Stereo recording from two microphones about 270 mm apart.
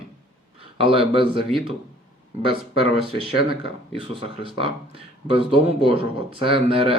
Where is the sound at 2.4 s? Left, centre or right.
Centre.